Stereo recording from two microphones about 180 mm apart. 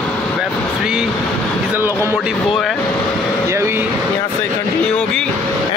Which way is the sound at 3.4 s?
15° right (ahead or behind).